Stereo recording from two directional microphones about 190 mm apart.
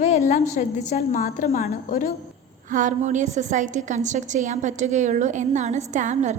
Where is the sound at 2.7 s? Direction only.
40° right (ahead or behind).